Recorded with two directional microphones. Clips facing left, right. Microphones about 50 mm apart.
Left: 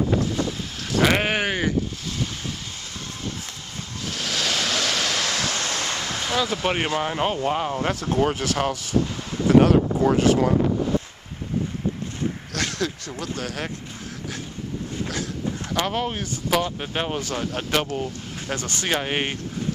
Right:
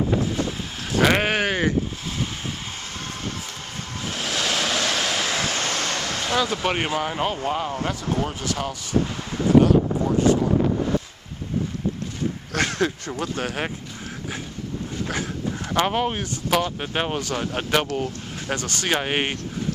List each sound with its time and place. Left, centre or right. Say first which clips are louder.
0.8 s speech: right 1 dB; centre
4.1 s waves: right 1 dB; centre
5.4 s vehicle: right 1 dB; right
6.2 s speech: right 1 dB; centre
7.0 s speech: left 1 dB; centre
7.6 s speech: left 2 dB; left
7.9 s speech: left 4 dB; left
12.5 s speech: right 6 dB; right
15.0 s speech: right 2 dB; right
17.2 s speech: right 1 dB; centre
18.9 s speech: right 2 dB; centre